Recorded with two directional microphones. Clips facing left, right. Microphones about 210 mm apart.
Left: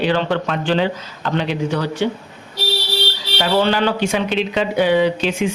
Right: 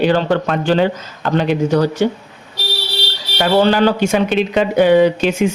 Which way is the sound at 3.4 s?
40° right (ahead or behind).